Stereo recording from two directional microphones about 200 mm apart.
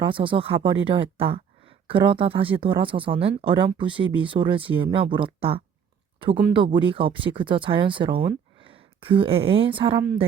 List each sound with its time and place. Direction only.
0.0 s speech: 25° right (ahead or behind)